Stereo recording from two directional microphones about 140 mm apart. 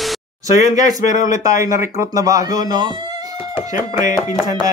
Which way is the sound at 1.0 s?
65° left (ahead or behind).